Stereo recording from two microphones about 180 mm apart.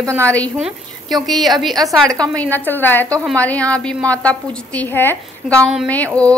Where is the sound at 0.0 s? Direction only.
15° right (ahead or behind).